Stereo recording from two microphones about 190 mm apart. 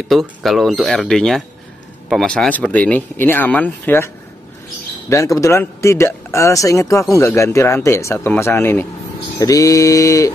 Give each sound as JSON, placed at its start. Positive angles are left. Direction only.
{"t": 0.1, "sound": "speech", "side_deg": 0}
{"t": 5.1, "sound": "speech", "side_deg": 15}